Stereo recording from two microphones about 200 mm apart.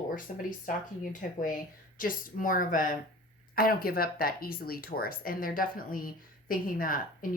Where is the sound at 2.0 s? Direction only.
45° left (ahead or behind).